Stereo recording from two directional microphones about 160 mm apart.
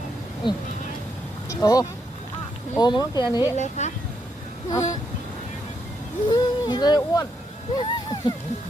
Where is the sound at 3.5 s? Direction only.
50° left (ahead or behind).